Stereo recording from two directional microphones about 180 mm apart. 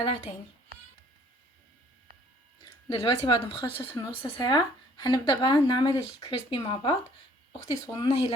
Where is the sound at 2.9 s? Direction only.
30° left (ahead or behind).